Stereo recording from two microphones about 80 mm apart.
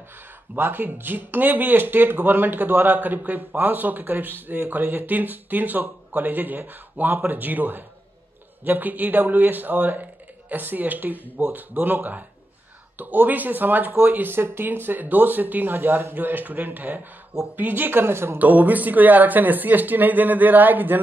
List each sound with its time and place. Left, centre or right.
0.6 s speech: right